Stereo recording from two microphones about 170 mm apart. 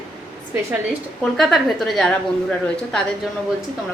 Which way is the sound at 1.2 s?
Centre (ahead or behind).